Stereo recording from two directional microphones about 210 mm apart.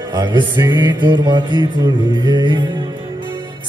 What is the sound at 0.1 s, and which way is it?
Music, 20° right (ahead or behind).